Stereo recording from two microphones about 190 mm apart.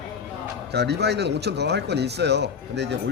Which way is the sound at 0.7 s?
60° right (ahead or behind).